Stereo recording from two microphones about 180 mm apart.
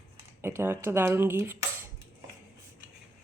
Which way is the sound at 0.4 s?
15° right (ahead or behind).